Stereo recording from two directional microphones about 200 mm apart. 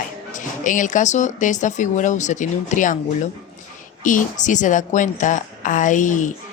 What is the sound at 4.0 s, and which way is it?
A woman's voice, 40° left (ahead or behind).